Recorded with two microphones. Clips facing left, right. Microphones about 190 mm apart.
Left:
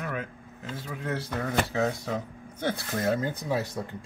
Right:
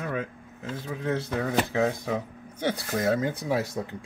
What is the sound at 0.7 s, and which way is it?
Speech, 20° right (ahead or behind).